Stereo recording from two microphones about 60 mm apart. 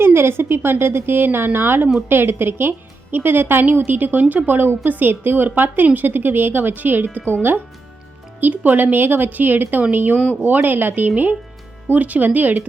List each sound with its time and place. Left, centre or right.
0.0 s speech: right
8.4 s speech: right